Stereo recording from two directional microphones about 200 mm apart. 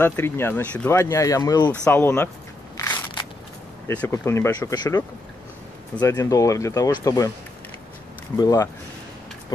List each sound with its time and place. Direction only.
0.0 s speech: 10° left (ahead or behind)
2.8 s crackle: 15° left (ahead or behind)
3.8 s speech: 10° left (ahead or behind)
8.4 s speech: 20° left (ahead or behind)